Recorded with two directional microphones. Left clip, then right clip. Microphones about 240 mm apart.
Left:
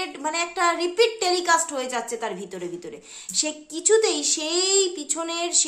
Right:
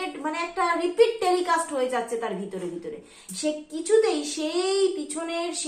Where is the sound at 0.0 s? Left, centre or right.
Left.